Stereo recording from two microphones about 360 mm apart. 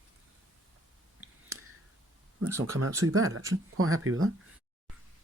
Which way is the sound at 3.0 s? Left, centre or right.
Right.